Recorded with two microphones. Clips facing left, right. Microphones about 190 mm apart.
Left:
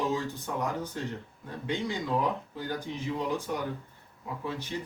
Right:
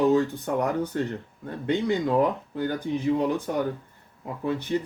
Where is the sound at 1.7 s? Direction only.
60° right (ahead or behind).